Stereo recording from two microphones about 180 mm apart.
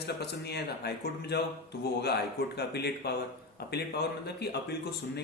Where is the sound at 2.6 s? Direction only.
65° left (ahead or behind).